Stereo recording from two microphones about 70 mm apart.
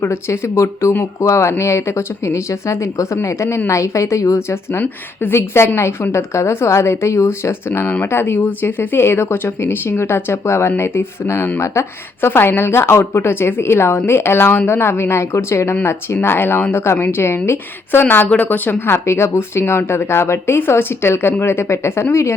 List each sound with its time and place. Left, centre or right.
0.0 s a woman's voice: left
7.7 s a woman's voice: left
11.6 s a woman's voice: left
18.3 s speech: left
19.0 s a woman's voice: left